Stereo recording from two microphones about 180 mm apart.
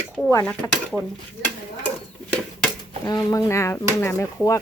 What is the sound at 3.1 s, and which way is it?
A woman's voice, 20° left (ahead or behind).